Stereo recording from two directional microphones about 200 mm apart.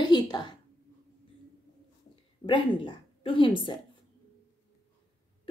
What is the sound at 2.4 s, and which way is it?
A woman's voice, 25° left (ahead or behind).